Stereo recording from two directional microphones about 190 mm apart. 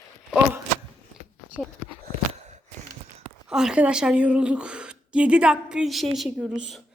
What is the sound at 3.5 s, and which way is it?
Speech, 5° right (ahead or behind).